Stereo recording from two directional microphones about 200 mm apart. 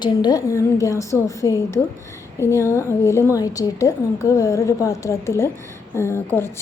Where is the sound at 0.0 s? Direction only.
20° left (ahead or behind).